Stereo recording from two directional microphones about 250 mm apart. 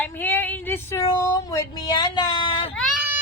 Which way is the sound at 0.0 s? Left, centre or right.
Centre.